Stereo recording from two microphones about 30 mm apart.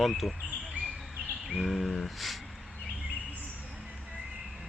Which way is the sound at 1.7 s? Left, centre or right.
Centre.